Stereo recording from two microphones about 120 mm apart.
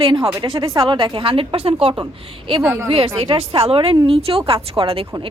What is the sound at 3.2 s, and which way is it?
A woman's voice, 50° right (ahead or behind).